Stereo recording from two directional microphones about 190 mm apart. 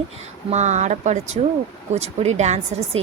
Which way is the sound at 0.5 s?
35° right (ahead or behind).